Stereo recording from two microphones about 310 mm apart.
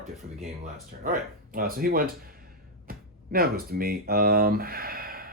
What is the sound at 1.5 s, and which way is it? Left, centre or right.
Speech, right.